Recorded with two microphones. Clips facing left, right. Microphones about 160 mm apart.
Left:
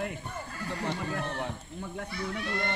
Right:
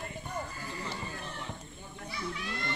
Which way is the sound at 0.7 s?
70° left (ahead or behind).